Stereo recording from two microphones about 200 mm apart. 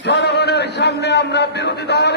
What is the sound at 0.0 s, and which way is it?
A man's voice, 60° left (ahead or behind).